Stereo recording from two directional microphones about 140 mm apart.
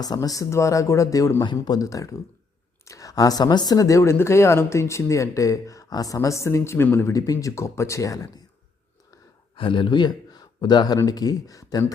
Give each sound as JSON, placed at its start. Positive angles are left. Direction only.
{"t": 0.0, "sound": "a woman's voice", "side_deg": 25}
{"t": 9.6, "sound": "speech", "side_deg": 35}